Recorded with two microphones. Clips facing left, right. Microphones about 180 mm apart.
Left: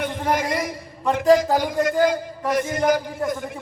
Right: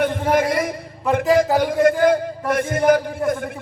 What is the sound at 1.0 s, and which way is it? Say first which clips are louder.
Speech: right 3 dB; 5° right (ahead or behind).